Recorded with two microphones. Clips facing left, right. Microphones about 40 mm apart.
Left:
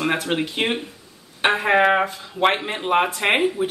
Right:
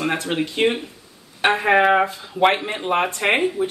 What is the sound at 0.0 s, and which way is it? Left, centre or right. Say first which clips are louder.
Speech: even; centre.